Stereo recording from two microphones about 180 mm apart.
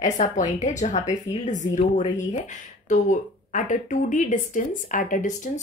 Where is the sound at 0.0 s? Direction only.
40° left (ahead or behind).